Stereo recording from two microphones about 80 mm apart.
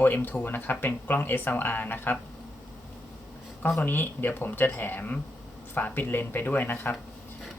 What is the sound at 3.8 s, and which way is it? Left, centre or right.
Speech, left.